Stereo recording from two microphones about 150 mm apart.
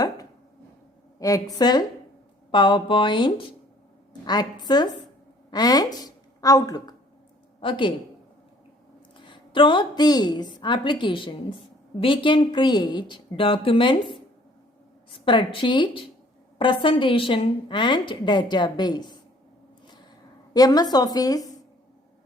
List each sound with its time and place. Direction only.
1.2 s a woman's voice: 20° left (ahead or behind)
9.1 s a woman's voice: 35° left (ahead or behind)
20.5 s a woman's voice: 25° left (ahead or behind)